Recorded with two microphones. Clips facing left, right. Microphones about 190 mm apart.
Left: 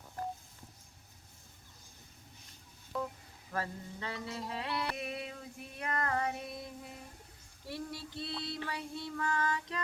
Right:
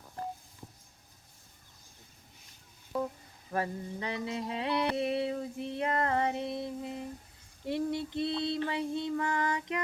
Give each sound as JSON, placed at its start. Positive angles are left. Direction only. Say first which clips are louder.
{"t": 3.5, "sound": "mantra", "louder": "right 5 dB", "side_deg": -20}